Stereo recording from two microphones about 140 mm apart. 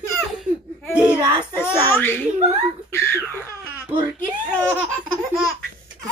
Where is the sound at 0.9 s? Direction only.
15° right (ahead or behind).